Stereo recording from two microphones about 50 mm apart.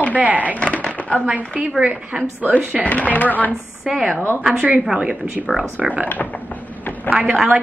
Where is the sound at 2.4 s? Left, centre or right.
Right.